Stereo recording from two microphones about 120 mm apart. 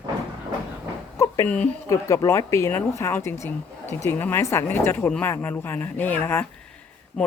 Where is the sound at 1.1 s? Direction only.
25° left (ahead or behind).